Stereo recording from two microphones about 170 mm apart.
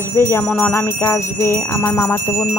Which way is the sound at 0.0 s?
15° left (ahead or behind).